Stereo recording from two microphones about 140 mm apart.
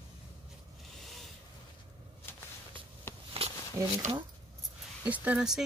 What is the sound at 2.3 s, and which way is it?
Whip, 15° left (ahead or behind).